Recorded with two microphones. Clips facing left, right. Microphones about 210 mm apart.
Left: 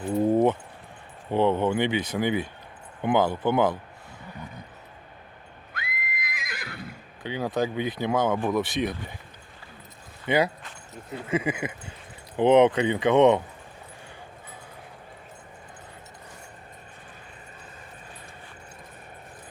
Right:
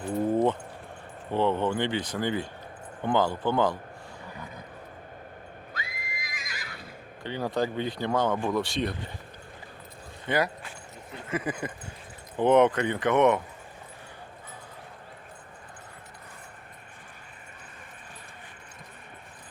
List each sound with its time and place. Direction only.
1.3 s speech: 15° left (ahead or behind)
5.7 s neigh: 60° left (ahead or behind)
7.2 s speech: 15° left (ahead or behind)
10.2 s speech: 25° left (ahead or behind)
11.3 s speech: 10° left (ahead or behind)